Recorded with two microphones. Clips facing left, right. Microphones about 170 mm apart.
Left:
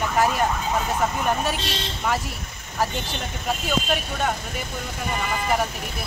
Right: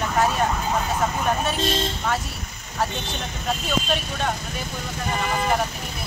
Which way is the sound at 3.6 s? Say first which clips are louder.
Left 1 dB; 5° left (ahead or behind).